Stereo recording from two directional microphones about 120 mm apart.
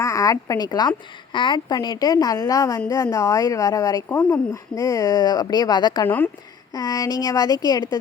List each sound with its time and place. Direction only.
0.0 s a woman's voice: 25° left (ahead or behind)